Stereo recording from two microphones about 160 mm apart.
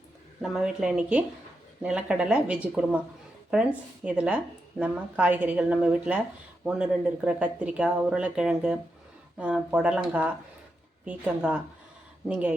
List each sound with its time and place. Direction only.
0.4 s speech: centre (ahead or behind)